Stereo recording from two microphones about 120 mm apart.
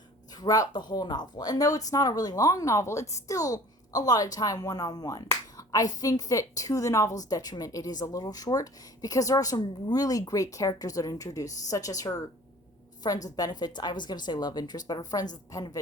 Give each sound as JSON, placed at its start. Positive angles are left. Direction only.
{"t": 0.3, "sound": "speech", "side_deg": 30}
{"t": 13.2, "sound": "speech", "side_deg": 30}